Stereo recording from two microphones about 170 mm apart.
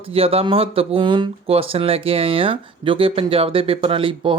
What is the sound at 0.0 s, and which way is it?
Speech, 35° right (ahead or behind).